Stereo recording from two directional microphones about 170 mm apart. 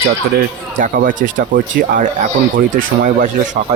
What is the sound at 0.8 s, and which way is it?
Speech, 50° right (ahead or behind).